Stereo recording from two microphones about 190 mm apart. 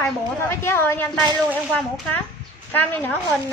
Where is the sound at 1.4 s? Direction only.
10° right (ahead or behind).